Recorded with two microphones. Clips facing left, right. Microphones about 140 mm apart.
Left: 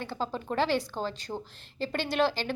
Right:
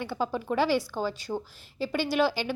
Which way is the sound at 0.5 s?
10° right (ahead or behind).